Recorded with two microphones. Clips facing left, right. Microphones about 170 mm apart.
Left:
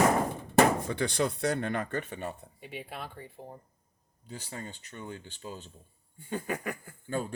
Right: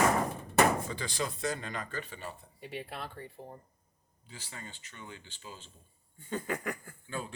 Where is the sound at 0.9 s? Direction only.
65° left (ahead or behind).